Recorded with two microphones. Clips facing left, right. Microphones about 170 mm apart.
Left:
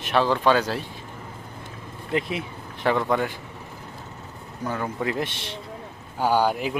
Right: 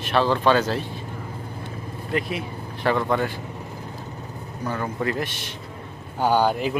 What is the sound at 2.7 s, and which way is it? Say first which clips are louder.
Vehicle: even; 15° left (ahead or behind).